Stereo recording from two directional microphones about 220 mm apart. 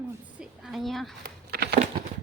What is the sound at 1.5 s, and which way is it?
Crumpling, 45° right (ahead or behind).